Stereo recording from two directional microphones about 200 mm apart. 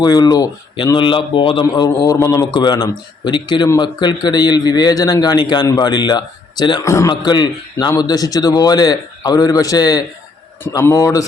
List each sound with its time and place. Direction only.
0.0 s a man's voice: 20° left (ahead or behind)